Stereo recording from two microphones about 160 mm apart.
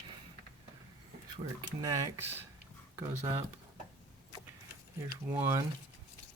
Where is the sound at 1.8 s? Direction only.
20° right (ahead or behind).